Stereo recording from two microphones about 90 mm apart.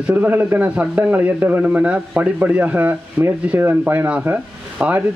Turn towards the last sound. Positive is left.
turn(degrees=-20)  # may be behind; listen again after turning